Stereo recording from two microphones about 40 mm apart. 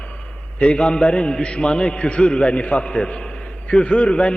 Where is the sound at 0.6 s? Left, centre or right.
Left.